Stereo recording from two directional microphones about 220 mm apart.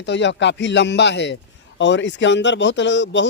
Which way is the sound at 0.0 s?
55° left (ahead or behind).